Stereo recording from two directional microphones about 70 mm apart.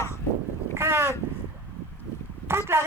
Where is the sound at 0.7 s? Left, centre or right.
Right.